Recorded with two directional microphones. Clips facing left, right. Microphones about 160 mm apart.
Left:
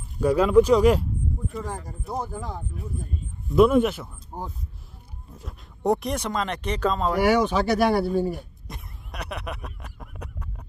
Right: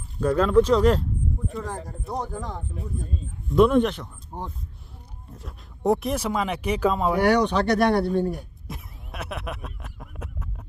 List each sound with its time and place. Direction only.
0.2 s speech: 10° left (ahead or behind); by 7.2 s 10° right (ahead or behind)
7.2 s speech: centre (ahead or behind)